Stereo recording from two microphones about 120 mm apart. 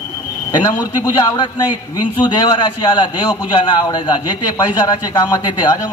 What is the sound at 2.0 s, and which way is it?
A man's voice, 35° left (ahead or behind).